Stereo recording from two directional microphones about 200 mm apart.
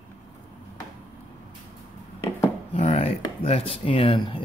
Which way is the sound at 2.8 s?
30° left (ahead or behind).